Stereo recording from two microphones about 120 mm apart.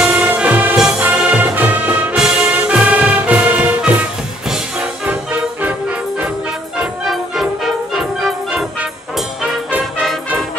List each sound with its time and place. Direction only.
0.0 s music: 10° right (ahead or behind)